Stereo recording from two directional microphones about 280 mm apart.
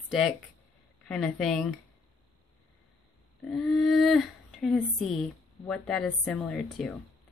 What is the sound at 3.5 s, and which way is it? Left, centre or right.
Speech, centre.